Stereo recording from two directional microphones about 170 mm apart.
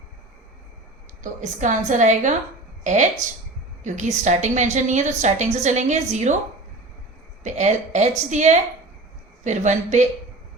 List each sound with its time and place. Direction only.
1.2 s a woman's voice: 45° right (ahead or behind)
7.4 s a woman's voice: 45° right (ahead or behind)